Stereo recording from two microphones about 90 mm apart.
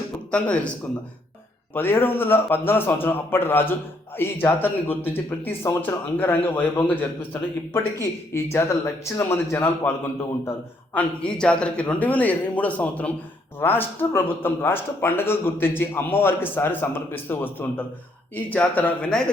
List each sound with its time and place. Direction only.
0.3 s a man's voice: 15° left (ahead or behind)
1.7 s speech: 25° left (ahead or behind)
8.3 s speech: 30° left (ahead or behind)
10.9 s a man's voice: 10° left (ahead or behind)